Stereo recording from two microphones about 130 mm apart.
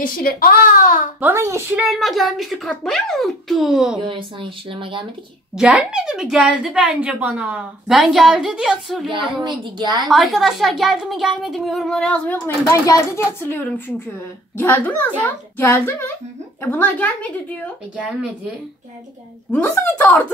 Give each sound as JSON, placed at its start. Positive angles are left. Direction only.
{"t": 0.7, "sound": "baby cry", "side_deg": 90}
{"t": 1.2, "sound": "a woman's voice", "side_deg": -20}
{"t": 1.8, "sound": "a woman's voice", "side_deg": -5}
{"t": 4.0, "sound": "speech", "side_deg": -40}
{"t": 5.6, "sound": "a woman's voice", "side_deg": -5}
{"t": 9.4, "sound": "speech", "side_deg": -35}
{"t": 10.0, "sound": "a woman's voice", "side_deg": 0}
{"t": 12.8, "sound": "a child's voice", "side_deg": 25}
{"t": 19.5, "sound": "a child's voice", "side_deg": 10}